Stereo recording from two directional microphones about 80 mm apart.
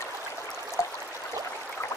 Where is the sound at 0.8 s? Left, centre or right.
Left.